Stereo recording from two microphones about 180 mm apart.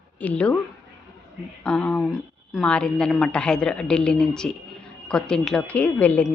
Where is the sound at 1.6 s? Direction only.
5° left (ahead or behind).